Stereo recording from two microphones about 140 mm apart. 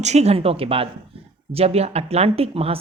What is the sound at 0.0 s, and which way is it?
Speech, 50° right (ahead or behind).